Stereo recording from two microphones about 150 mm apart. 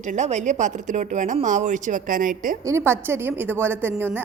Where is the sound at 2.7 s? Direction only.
15° right (ahead or behind).